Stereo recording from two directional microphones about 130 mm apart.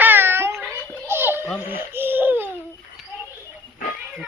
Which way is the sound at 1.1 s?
15° right (ahead or behind).